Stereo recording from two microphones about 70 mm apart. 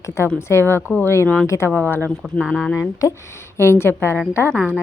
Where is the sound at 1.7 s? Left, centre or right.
Left.